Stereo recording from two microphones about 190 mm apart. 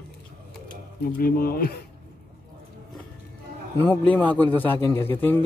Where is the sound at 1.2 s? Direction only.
50° left (ahead or behind).